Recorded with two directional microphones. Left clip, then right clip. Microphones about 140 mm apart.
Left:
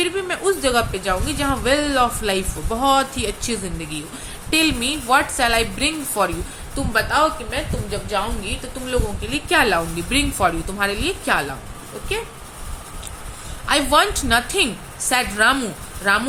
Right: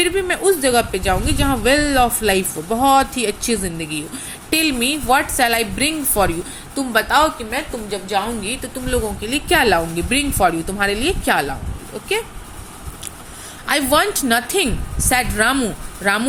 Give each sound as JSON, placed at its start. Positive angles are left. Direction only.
{"t": 0.0, "sound": "a woman's voice", "side_deg": -40}
{"t": 13.7, "sound": "a woman's voice", "side_deg": -35}